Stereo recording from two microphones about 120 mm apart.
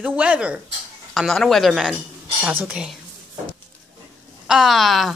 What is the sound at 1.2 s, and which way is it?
Speech, centre (ahead or behind).